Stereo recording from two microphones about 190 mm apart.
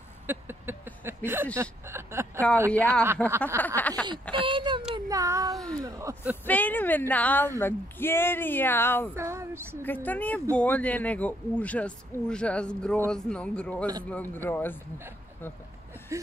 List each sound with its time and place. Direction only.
0.3 s a sound: 10° right (ahead or behind)
3.5 s a woman's voice: 10° left (ahead or behind)
4.1 s speech: 25° right (ahead or behind)
4.9 s child singing: 15° right (ahead or behind)
5.9 s speech: 15° right (ahead or behind)
6.4 s a woman's voice: 10° left (ahead or behind)
9.1 s a sound: 15° right (ahead or behind)
9.8 s a woman's voice: 10° left (ahead or behind)
16.1 s a sound: 15° right (ahead or behind)